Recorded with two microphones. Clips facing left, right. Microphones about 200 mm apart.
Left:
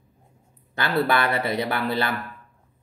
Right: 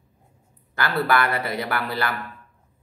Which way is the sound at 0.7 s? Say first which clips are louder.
Even; 25° left (ahead or behind).